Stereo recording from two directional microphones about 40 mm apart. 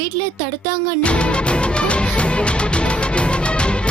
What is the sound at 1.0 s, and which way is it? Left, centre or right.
Music, left.